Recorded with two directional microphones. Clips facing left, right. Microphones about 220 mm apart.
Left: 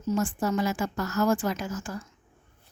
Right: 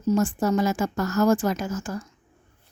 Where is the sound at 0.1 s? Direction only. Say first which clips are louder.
Right 5 dB; 40° right (ahead or behind).